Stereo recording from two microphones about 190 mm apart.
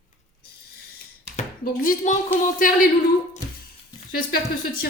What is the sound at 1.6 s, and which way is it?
A woman's voice, 45° left (ahead or behind).